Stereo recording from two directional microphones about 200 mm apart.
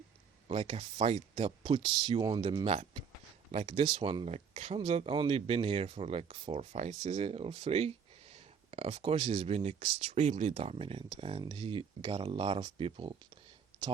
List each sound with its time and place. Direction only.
0.4 s speech: 30° right (ahead or behind)